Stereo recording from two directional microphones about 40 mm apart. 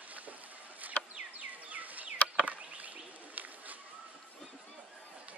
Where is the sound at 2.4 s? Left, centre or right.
Right.